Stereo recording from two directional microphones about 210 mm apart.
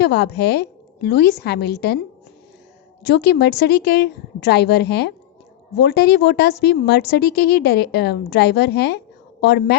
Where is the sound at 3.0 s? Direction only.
55° left (ahead or behind).